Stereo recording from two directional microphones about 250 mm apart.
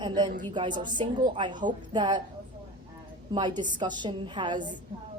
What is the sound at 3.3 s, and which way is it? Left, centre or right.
A woman's voice, centre.